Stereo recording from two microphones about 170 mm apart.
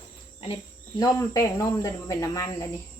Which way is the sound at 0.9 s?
20° left (ahead or behind).